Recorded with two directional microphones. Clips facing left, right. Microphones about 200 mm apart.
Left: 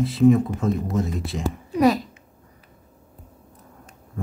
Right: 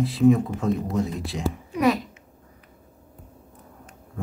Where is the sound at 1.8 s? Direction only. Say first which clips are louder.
Left 3 dB; 35° left (ahead or behind).